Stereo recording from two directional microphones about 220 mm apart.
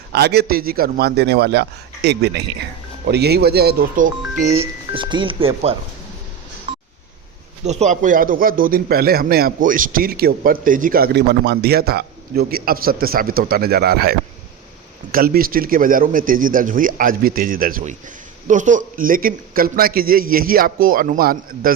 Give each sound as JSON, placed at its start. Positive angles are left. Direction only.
{"t": 0.1, "sound": "a man's voice", "side_deg": -45}
{"t": 4.9, "sound": "speech", "side_deg": -20}
{"t": 7.6, "sound": "a man's voice", "side_deg": -30}